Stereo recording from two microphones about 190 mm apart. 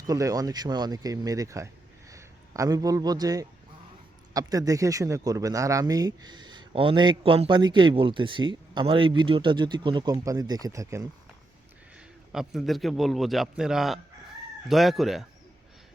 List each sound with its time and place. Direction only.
0.1 s speech: 20° right (ahead or behind)
12.3 s a man's voice: centre (ahead or behind)